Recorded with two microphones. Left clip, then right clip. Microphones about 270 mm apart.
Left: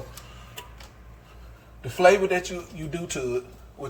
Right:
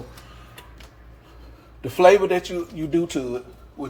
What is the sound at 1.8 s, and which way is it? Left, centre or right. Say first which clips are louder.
Speech: right 4 dB; right.